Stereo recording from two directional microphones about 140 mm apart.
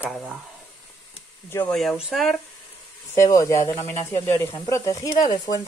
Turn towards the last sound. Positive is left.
turn(degrees=30)  # may be behind; listen again after turning